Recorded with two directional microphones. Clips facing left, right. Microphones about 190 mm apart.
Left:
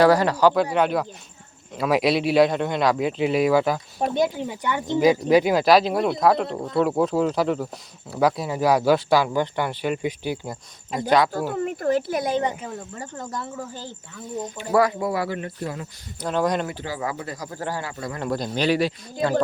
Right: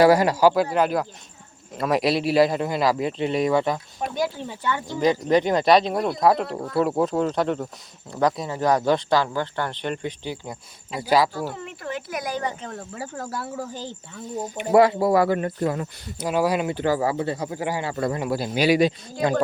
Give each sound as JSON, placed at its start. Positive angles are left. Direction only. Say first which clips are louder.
{"t": 0.0, "sound": "a man's voice", "louder": "right 1 dB", "side_deg": -10}
{"t": 4.1, "sound": "a man's voice", "louder": "left 3 dB", "side_deg": 15}
{"t": 11.0, "sound": "a man's voice", "louder": "left 1 dB", "side_deg": -5}
{"t": 11.3, "sound": "speech", "louder": "left 5 dB", "side_deg": 45}
{"t": 13.0, "sound": "speech", "louder": "right 3 dB", "side_deg": -5}
{"t": 14.5, "sound": "speech", "louder": "right 4 dB", "side_deg": -20}
{"t": 16.2, "sound": "speech", "louder": "right 1 dB", "side_deg": -10}
{"t": 16.7, "sound": "speech", "louder": "right 9 dB", "side_deg": -55}
{"t": 17.0, "sound": "speech", "louder": "right 6 dB", "side_deg": -30}
{"t": 17.5, "sound": "speech", "louder": "right 3 dB", "side_deg": -15}